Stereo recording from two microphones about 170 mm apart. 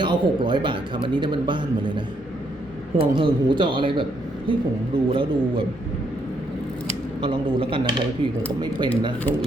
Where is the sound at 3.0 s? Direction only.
30° right (ahead or behind).